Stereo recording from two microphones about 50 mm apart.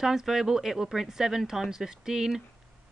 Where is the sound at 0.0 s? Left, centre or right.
Centre.